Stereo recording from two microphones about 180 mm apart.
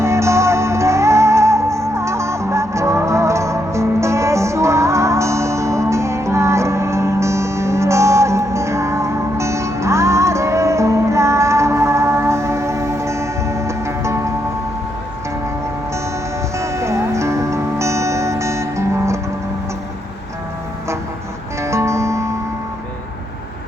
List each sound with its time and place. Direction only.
0.0 s music: 15° right (ahead or behind)
16.6 s music: 15° right (ahead or behind)
21.6 s music: 15° right (ahead or behind)